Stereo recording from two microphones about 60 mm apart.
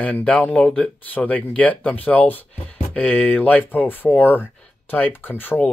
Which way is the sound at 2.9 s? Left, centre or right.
Centre.